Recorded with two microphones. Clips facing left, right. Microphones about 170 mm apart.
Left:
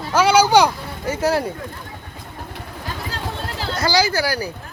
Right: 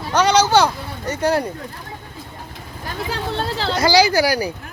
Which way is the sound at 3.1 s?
80° right.